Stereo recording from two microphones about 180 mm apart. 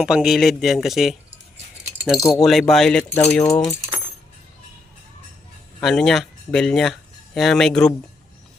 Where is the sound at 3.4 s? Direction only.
20° left (ahead or behind).